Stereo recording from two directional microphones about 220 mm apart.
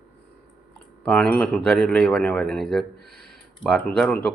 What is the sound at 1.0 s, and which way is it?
Speech, 5° left (ahead or behind).